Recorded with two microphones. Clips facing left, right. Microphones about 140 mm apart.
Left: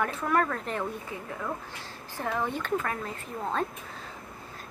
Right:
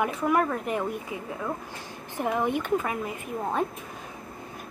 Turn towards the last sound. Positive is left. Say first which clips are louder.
# right 3 dB
turn(degrees=-15)  # may be behind; listen again after turning